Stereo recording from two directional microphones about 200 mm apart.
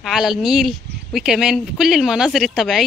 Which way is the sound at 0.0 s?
Centre (ahead or behind).